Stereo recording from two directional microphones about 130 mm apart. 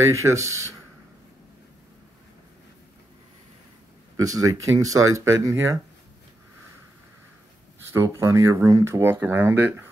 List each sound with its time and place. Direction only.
0.1 s speech: 25° right (ahead or behind)
4.2 s speech: 25° right (ahead or behind)
7.9 s speech: 20° right (ahead or behind)